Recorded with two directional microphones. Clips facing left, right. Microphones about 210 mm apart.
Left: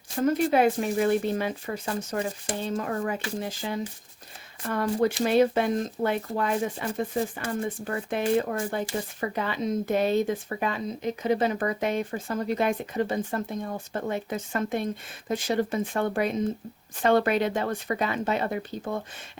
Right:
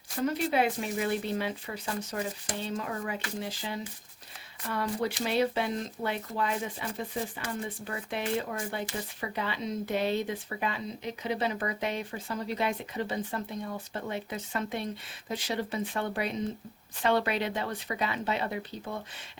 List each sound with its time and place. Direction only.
0.2 s speech: 45° left (ahead or behind)